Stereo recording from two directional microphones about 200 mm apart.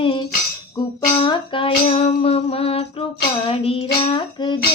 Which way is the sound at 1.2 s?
25° left (ahead or behind).